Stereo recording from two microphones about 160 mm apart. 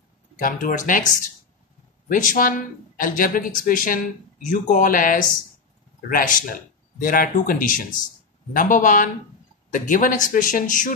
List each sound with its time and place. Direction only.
0.4 s speech: 55° left (ahead or behind)